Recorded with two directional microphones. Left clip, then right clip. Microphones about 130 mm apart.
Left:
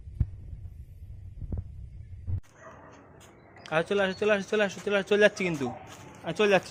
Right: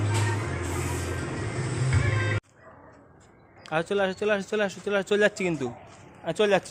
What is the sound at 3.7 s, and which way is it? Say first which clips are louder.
Speech: right 1 dB; 20° right (ahead or behind).